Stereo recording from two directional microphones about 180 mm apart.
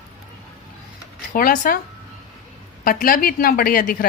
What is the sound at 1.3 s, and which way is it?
Speech, 50° left (ahead or behind).